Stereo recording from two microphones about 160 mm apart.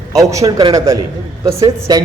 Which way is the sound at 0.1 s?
20° right (ahead or behind).